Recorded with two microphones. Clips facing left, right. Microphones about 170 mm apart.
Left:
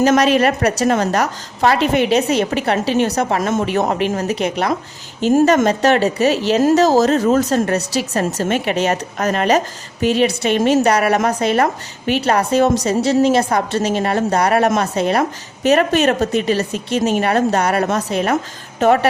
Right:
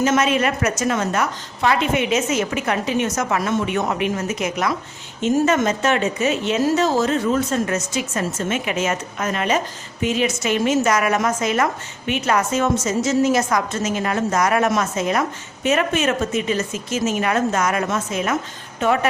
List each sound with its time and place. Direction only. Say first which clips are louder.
0.0 s a woman's voice: left 5 dB; 35° left (ahead or behind)
5.3 s a woman's voice: left 5 dB; 50° left (ahead or behind)
5.6 s a woman's voice: left 5 dB; 35° left (ahead or behind)